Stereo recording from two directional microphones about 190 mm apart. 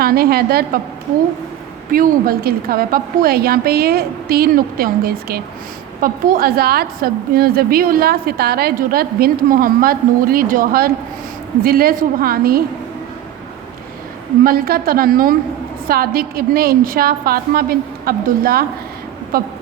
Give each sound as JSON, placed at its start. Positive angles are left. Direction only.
{"t": 0.0, "sound": "a woman's voice", "side_deg": -55}
{"t": 1.9, "sound": "a woman's voice", "side_deg": -50}
{"t": 14.4, "sound": "a woman's voice", "side_deg": -50}